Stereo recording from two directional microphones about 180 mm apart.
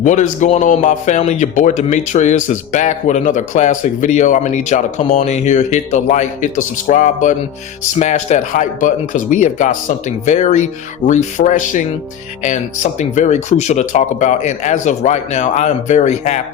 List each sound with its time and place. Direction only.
0.0 s speech: 45° left (ahead or behind)